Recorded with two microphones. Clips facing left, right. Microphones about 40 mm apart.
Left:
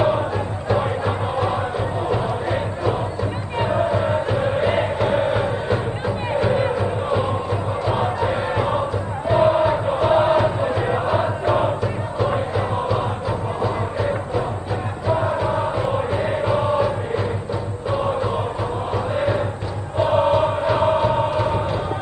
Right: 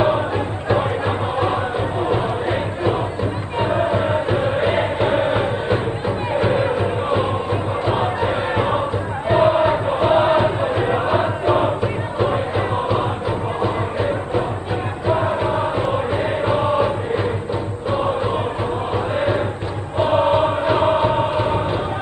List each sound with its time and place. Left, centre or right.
0.7 s music: right
7.8 s crowd: right
9.3 s chant: right
13.6 s music: right
18.9 s chant: right
20.0 s music: right